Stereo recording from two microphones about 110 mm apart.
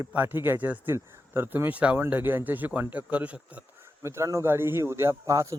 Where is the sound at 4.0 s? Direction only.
25° right (ahead or behind).